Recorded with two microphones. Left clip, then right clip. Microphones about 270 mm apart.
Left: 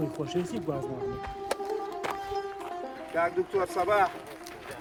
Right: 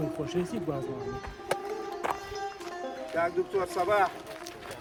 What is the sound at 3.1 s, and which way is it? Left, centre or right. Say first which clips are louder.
Speech: left 1 dB; centre.